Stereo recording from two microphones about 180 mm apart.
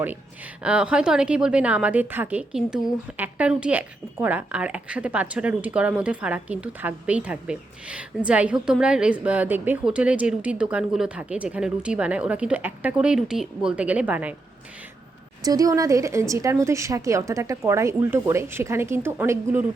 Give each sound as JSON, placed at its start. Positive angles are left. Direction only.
{"t": 0.6, "sound": "a woman's voice", "side_deg": -5}
{"t": 15.4, "sound": "a woman's voice", "side_deg": -20}